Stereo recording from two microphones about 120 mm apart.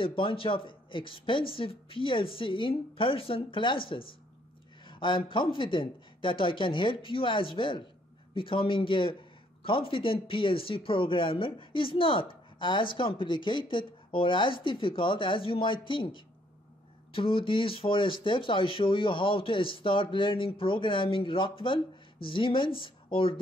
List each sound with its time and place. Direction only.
0.0 s speech: 45° left (ahead or behind)